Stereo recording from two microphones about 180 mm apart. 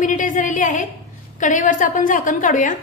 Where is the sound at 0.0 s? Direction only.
45° left (ahead or behind).